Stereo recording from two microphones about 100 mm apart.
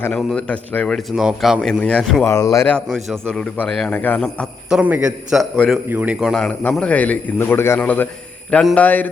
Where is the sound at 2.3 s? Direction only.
35° left (ahead or behind).